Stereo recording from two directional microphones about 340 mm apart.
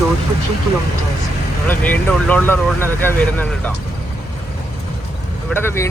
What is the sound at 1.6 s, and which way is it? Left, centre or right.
Speech, centre.